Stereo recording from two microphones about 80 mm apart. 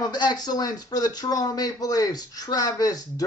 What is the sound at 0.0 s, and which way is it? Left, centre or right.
Speech, left.